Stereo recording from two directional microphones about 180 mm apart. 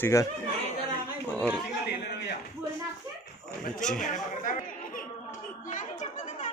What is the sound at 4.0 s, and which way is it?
Chatter, 45° left (ahead or behind).